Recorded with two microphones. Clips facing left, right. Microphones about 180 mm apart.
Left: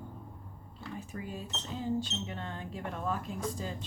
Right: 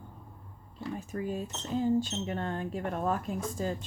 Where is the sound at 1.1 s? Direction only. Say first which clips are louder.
Right 7 dB; 45° right (ahead or behind).